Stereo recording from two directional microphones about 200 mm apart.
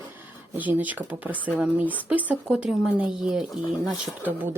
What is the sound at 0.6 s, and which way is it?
Speech, 10° right (ahead or behind).